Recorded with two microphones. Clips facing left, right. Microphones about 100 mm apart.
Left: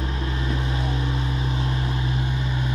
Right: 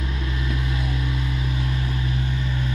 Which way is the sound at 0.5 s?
30° left (ahead or behind).